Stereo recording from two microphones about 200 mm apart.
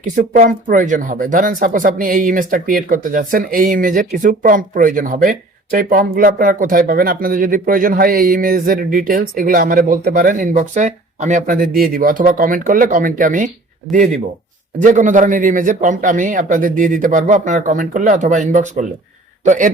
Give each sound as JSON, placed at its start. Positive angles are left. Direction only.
{"t": 0.0, "sound": "speech", "side_deg": -40}
{"t": 14.8, "sound": "a man's voice", "side_deg": -40}